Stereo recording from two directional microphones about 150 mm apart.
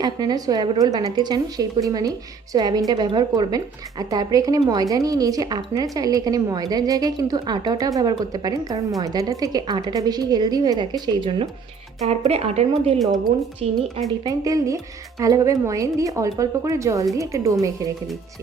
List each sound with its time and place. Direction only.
0.0 s a woman's voice: 30° right (ahead or behind)
12.0 s a woman's voice: 45° right (ahead or behind)
14.3 s a woman's voice: 25° right (ahead or behind)